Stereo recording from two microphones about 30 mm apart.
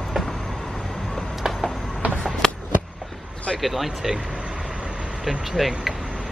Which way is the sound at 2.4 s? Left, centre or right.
Centre.